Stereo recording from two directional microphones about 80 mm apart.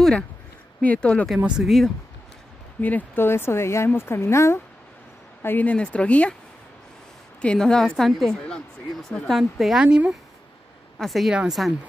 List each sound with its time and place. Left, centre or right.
0.8 s a woman's voice: centre
1.6 s speech: centre
2.8 s speech: left
5.4 s a woman's voice: left
7.4 s a woman's voice: centre
11.0 s speech: centre